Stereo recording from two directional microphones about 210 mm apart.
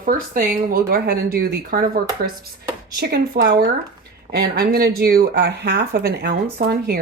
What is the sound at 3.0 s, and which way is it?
Speech, 50° right (ahead or behind).